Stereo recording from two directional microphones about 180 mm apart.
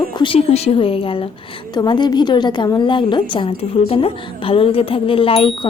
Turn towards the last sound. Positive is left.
turn(degrees=30)  # may be behind; listen again after turning